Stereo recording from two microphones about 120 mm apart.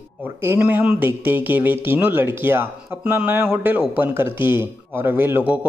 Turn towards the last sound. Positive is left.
turn(degrees=-20)  # may be behind; listen again after turning